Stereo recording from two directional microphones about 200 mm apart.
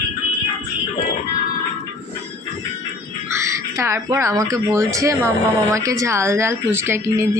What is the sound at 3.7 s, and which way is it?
Speech, 15° right (ahead or behind).